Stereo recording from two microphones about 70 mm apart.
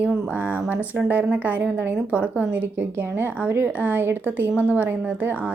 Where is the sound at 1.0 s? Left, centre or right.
Right.